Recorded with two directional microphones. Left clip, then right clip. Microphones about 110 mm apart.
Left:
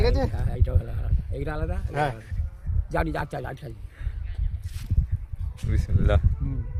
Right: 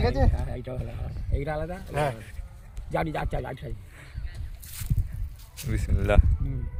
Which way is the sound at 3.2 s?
20° left (ahead or behind).